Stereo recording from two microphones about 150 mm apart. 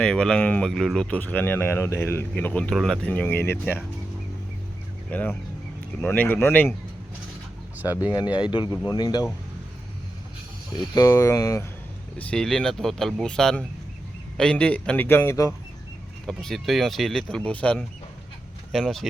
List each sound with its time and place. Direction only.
0.0 s speech: 5° left (ahead or behind)
5.1 s speech: 10° left (ahead or behind)
8.4 s speech: 35° left (ahead or behind)
10.8 s speech: 25° left (ahead or behind)
12.1 s speech: 5° left (ahead or behind)
16.2 s speech: 5° left (ahead or behind)